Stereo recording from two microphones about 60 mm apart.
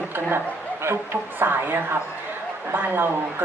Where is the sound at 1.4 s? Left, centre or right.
Right.